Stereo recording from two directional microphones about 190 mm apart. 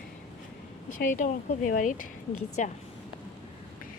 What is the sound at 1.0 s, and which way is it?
A woman's voice, 40° left (ahead or behind).